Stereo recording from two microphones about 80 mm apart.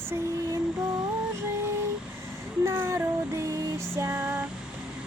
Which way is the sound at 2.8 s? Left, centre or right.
Right.